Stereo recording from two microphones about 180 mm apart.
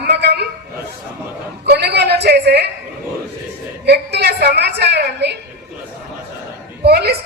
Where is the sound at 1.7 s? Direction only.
65° right (ahead or behind).